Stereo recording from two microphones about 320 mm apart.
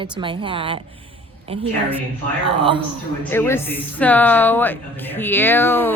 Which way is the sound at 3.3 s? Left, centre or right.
Centre.